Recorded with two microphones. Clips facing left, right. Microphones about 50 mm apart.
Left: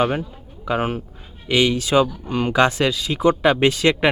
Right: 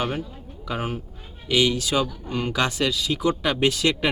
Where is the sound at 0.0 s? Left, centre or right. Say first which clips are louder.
Left 7 dB; left.